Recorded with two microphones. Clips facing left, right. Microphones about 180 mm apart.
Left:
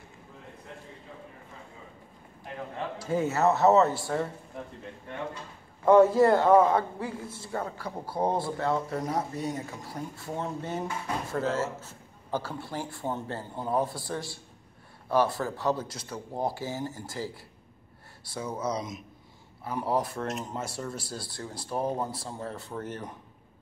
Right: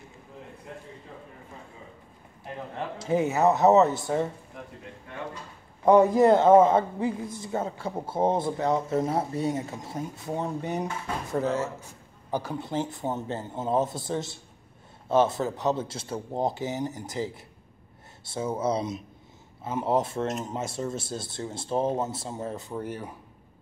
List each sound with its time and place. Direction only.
3.0 s a man's voice: 20° right (ahead or behind)
5.9 s a man's voice: 15° right (ahead or behind)